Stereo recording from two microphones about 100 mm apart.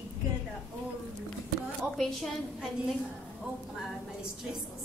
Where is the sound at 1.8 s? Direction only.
5° left (ahead or behind).